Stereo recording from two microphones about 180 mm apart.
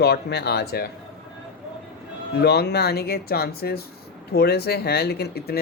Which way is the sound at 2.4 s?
65° left (ahead or behind).